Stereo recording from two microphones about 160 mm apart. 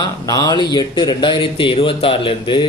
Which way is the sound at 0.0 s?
25° left (ahead or behind).